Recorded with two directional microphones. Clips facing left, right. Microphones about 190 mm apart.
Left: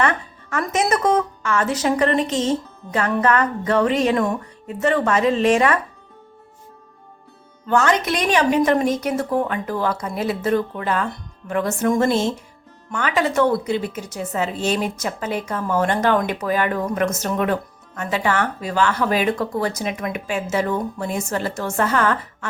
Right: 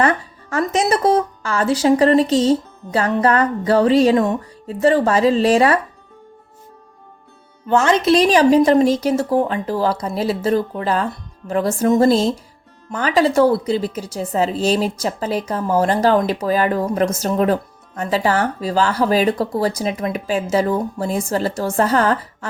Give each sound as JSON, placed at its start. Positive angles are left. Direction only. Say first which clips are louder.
{"t": 0.5, "sound": "a woman's voice", "louder": "right 3 dB", "side_deg": -30}
{"t": 7.7, "sound": "a woman's voice", "louder": "right 4 dB", "side_deg": -25}